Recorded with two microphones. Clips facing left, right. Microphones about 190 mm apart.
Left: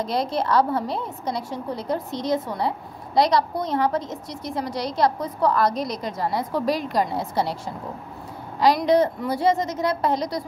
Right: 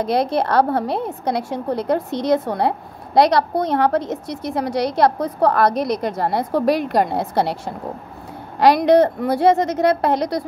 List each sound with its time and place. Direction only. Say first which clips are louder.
0.0 s a woman's voice: right 5 dB; 60° right (ahead or behind)